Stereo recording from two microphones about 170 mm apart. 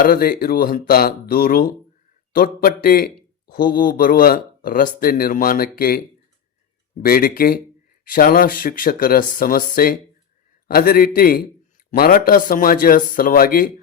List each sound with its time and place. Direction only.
0.0 s a man's voice: 60° left (ahead or behind)
7.0 s a man's voice: 60° left (ahead or behind)